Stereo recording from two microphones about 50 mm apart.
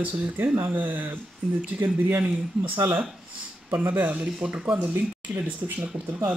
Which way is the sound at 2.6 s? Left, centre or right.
Right.